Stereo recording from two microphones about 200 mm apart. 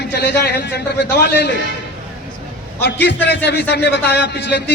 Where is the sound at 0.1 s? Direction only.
55° left (ahead or behind).